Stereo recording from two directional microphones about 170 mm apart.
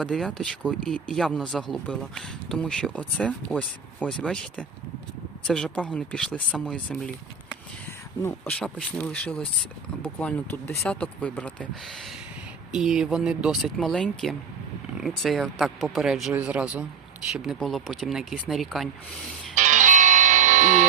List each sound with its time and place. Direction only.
0.0 s speech: 5° left (ahead or behind)
8.2 s speech: 10° left (ahead or behind)
12.7 s speech: 5° right (ahead or behind)
19.5 s music: 45° right (ahead or behind)